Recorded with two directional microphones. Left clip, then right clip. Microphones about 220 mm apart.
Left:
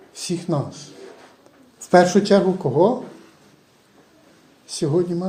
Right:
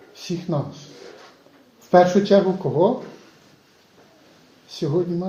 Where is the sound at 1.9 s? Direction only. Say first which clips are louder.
Even; 30° left (ahead or behind).